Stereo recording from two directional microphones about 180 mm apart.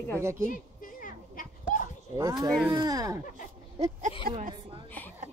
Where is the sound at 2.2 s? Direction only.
20° right (ahead or behind).